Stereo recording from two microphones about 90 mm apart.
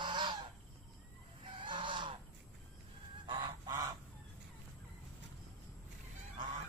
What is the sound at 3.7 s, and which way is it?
Goose, 45° right (ahead or behind).